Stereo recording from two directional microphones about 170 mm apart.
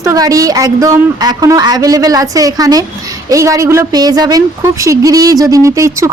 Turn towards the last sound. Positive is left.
turn(degrees=-20)  # may be behind; listen again after turning